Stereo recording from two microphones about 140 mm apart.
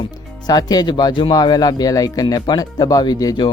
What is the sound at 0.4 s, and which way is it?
Speech, 30° left (ahead or behind).